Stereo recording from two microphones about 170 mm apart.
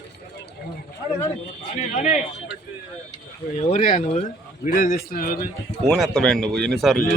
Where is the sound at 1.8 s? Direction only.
45° left (ahead or behind).